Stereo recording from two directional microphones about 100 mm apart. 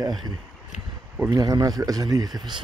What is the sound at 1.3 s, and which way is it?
Speech, 40° right (ahead or behind).